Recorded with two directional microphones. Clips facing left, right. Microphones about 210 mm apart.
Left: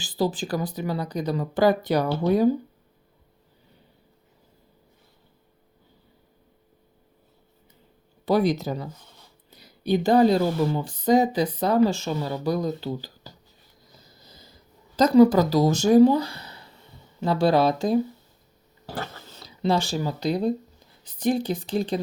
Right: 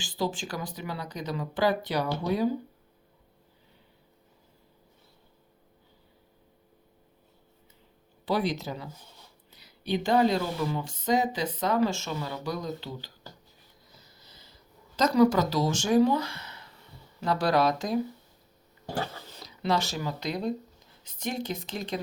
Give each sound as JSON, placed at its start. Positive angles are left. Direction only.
{"t": 0.0, "sound": "speech", "side_deg": 40}
{"t": 8.2, "sound": "speech", "side_deg": 45}
{"t": 14.3, "sound": "a sound", "side_deg": 40}
{"t": 14.9, "sound": "speech", "side_deg": 30}
{"t": 19.5, "sound": "speech", "side_deg": 30}